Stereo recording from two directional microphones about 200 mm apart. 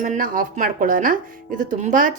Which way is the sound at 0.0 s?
40° right (ahead or behind).